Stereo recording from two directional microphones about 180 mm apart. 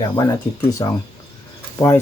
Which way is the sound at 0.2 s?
15° left (ahead or behind).